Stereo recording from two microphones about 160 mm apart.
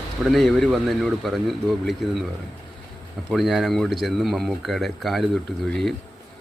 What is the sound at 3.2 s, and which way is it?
Speech, centre (ahead or behind).